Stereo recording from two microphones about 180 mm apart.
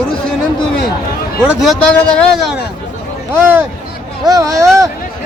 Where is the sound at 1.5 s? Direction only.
Centre (ahead or behind).